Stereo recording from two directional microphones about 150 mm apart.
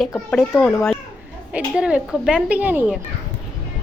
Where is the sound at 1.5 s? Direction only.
10° right (ahead or behind).